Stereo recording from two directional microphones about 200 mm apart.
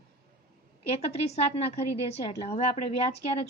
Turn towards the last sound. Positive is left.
turn(degrees=30)  # may be behind; listen again after turning